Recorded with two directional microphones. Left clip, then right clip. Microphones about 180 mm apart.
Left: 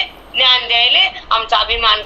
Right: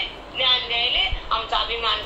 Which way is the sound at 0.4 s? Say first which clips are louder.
Left 9 dB; 45° left (ahead or behind).